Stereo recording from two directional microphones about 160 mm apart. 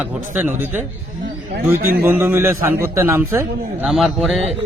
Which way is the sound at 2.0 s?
15° right (ahead or behind).